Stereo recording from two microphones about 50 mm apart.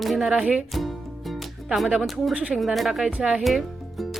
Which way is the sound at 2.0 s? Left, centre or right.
Centre.